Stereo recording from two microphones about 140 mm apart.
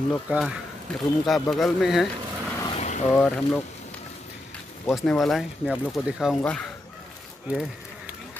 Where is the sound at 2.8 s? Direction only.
55° left (ahead or behind).